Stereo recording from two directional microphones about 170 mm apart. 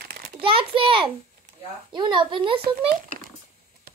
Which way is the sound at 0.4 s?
30° right (ahead or behind).